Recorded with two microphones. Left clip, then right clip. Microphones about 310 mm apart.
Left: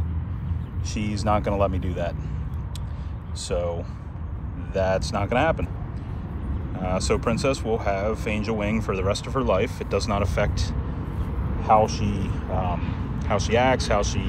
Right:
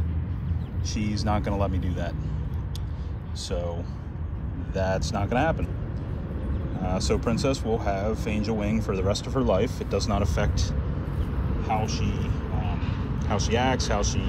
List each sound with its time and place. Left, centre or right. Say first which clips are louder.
1.1 s speech: left 6 dB; centre
1.7 s speech: left 1 dB; right
3.4 s speech: left 5 dB; centre
6.8 s speech: left 3 dB; centre